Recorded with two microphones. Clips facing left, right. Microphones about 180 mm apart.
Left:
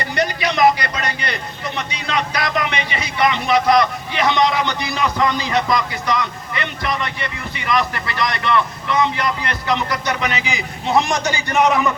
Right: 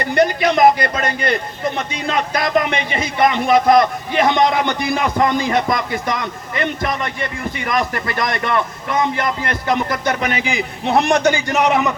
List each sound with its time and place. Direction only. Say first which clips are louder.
0.0 s a man's voice: right 6 dB; 55° right (ahead or behind)